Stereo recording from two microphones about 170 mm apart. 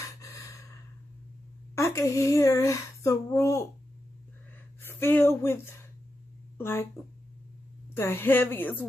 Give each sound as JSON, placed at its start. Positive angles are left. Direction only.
{"t": 0.2, "sound": "gasp", "side_deg": 20}
{"t": 1.8, "sound": "speech", "side_deg": 20}
{"t": 4.8, "sound": "a woman's voice", "side_deg": 10}
{"t": 7.9, "sound": "a woman's voice", "side_deg": 15}